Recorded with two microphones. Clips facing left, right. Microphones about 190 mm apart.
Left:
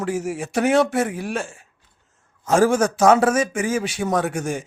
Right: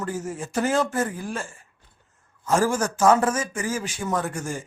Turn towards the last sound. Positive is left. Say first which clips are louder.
# left 5 dB
turn(degrees=70)  # may be behind; listen again after turning